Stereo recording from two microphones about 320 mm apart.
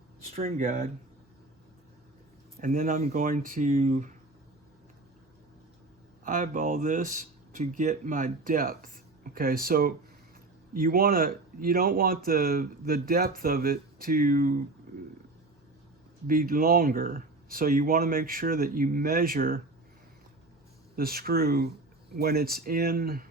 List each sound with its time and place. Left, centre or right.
0.3 s speech: right
2.6 s speech: right
6.2 s speech: right
16.2 s speech: right
20.9 s speech: right